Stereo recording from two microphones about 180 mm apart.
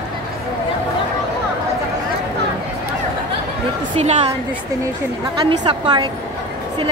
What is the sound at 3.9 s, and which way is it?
Speech, 35° right (ahead or behind).